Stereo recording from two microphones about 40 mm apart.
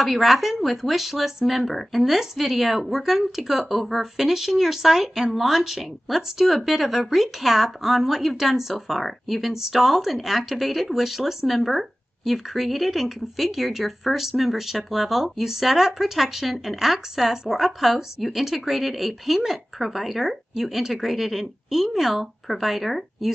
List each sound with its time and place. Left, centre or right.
0.0 s speech: centre